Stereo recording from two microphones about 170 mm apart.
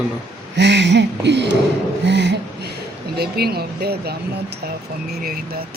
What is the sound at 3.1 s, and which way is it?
Speech, 70° right (ahead or behind).